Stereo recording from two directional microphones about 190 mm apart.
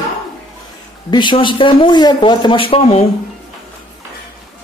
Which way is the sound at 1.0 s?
25° left (ahead or behind).